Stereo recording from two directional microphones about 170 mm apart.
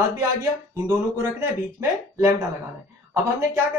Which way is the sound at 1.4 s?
15° right (ahead or behind).